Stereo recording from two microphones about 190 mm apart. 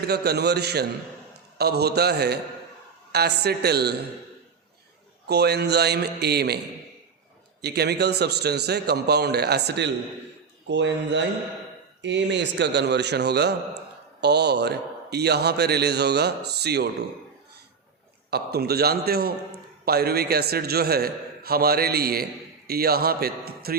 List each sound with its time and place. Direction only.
0.1 s a man's voice: 60° right (ahead or behind)
5.3 s a man's voice: 60° right (ahead or behind)
7.6 s a man's voice: 60° right (ahead or behind)
18.3 s a man's voice: 55° right (ahead or behind)